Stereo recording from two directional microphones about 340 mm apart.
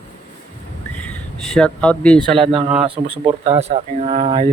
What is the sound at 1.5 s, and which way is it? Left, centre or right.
Speech, centre.